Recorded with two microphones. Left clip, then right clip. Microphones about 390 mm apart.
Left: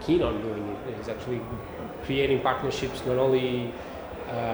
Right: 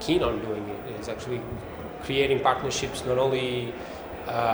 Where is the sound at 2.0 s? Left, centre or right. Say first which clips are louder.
Right 2 dB; right.